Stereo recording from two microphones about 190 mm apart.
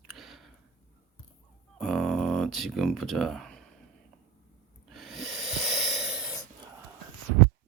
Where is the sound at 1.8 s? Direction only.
Centre (ahead or behind).